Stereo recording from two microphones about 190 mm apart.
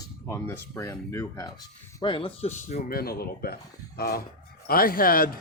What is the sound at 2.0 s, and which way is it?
Speech, 25° left (ahead or behind).